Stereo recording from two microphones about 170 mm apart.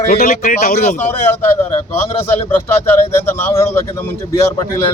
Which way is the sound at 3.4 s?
15° left (ahead or behind).